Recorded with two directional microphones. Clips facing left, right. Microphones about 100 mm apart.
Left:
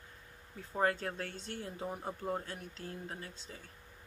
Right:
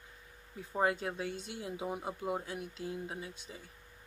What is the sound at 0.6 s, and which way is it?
Speech, 10° right (ahead or behind).